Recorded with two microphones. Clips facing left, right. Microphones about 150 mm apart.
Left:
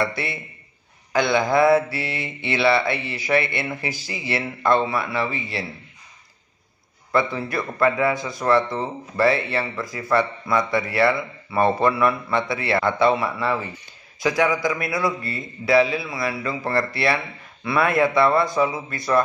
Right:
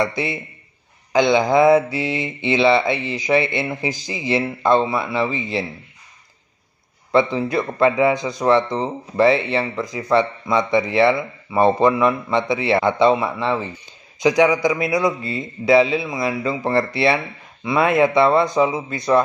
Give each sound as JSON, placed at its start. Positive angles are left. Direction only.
{"t": 0.0, "sound": "speech", "side_deg": -20}
{"t": 7.1, "sound": "speech", "side_deg": -20}